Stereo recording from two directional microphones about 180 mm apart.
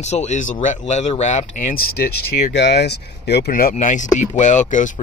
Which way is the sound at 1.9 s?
60° left (ahead or behind).